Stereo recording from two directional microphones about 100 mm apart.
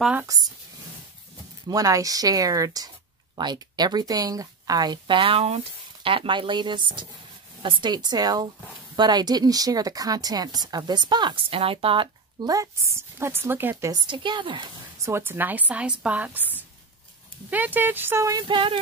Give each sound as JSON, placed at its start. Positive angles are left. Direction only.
{"t": 0.3, "sound": "speech", "side_deg": -35}
{"t": 1.7, "sound": "speech", "side_deg": -35}
{"t": 11.5, "sound": "speech", "side_deg": -70}
{"t": 12.4, "sound": "speech", "side_deg": -40}
{"t": 13.2, "sound": "speech", "side_deg": -25}
{"t": 13.9, "sound": "speech", "side_deg": -55}
{"t": 15.0, "sound": "speech", "side_deg": -25}
{"t": 18.5, "sound": "a sound", "side_deg": -55}